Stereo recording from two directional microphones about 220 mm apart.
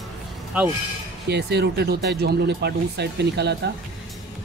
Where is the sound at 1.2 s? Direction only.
50° right (ahead or behind).